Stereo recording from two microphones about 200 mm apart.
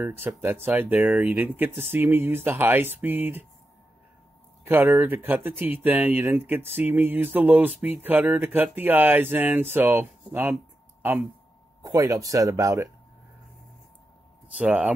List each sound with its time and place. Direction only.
0.0 s speech: 10° right (ahead or behind)
4.6 s speech: 10° right (ahead or behind)
14.6 s speech: 5° right (ahead or behind)